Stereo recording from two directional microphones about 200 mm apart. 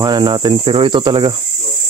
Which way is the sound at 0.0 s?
20° right (ahead or behind).